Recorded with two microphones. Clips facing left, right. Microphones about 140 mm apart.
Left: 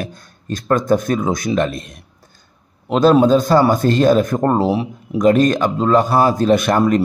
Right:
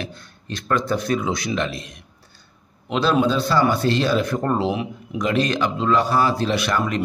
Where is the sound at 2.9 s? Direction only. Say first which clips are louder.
Left 8 dB; 45° left (ahead or behind).